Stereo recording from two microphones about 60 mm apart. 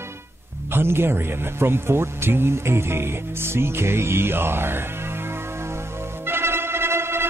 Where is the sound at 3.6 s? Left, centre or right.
Right.